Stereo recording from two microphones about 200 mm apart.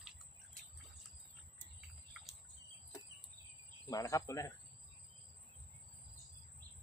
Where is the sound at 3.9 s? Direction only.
15° left (ahead or behind).